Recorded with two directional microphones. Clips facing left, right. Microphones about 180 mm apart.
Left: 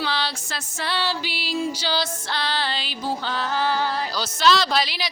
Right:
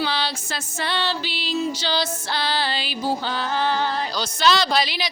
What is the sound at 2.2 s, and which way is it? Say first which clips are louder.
Music: right 2 dB; 5° right (ahead or behind).